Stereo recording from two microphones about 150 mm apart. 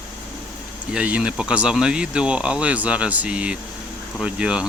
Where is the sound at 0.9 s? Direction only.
5° right (ahead or behind).